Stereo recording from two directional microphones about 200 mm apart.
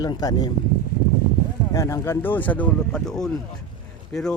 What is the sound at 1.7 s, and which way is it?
Speech, 15° left (ahead or behind).